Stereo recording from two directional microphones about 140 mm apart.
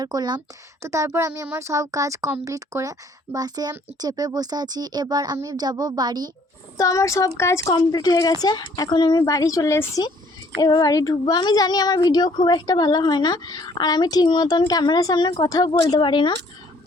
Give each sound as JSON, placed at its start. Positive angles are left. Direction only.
{"t": 0.0, "sound": "speech", "side_deg": -30}
{"t": 6.7, "sound": "speech", "side_deg": 25}